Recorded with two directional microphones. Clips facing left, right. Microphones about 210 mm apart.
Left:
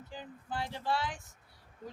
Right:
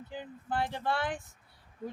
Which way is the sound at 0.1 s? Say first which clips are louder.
Right 5 dB; 60° right (ahead or behind).